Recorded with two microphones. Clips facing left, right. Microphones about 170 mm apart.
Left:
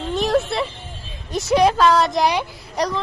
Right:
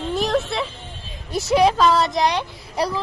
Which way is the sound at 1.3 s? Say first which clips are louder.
Left 1 dB; centre (ahead or behind).